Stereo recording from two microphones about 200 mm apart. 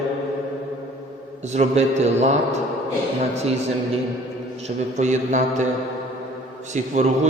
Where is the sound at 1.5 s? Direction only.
35° right (ahead or behind).